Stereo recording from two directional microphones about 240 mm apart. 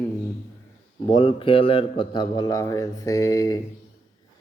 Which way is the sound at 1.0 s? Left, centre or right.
Left.